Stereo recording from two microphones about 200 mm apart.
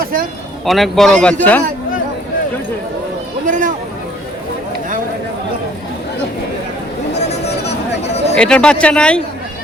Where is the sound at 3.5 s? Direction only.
40° right (ahead or behind).